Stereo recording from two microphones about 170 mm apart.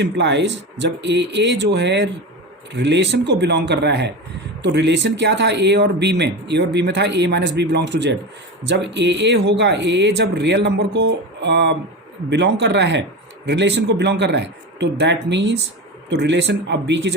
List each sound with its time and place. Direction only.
0.0 s speech: 90° right